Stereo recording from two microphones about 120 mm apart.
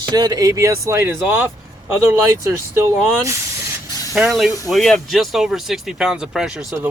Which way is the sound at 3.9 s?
30° left (ahead or behind).